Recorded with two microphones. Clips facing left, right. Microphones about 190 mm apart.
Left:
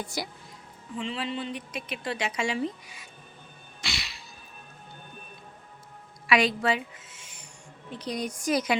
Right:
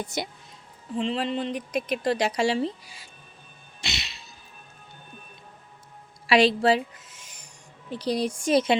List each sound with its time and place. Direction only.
0.0 s a woman's voice: 20° right (ahead or behind)
0.9 s speech: 40° right (ahead or behind)
3.8 s music: 20° right (ahead or behind)
6.2 s a woman's voice: 30° right (ahead or behind)